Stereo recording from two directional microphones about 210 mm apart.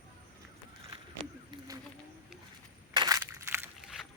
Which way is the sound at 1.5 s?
15° right (ahead or behind).